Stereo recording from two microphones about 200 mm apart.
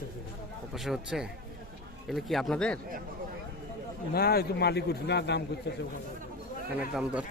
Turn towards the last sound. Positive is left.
turn(degrees=-5)  # may be behind; listen again after turning